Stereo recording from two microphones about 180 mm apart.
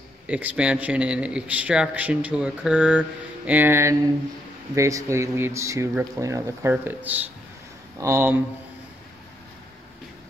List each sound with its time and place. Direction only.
0.3 s a man's voice: 10° right (ahead or behind)